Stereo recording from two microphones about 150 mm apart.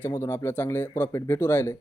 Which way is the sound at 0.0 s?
15° left (ahead or behind).